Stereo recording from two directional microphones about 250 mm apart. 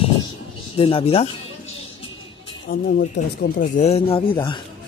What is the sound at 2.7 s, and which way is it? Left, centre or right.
Speech, left.